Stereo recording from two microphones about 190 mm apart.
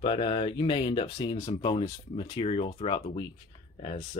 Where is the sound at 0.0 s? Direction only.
30° left (ahead or behind).